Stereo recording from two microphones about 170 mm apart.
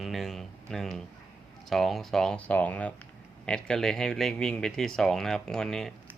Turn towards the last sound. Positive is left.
turn(degrees=0)  # may be behind; listen again after turning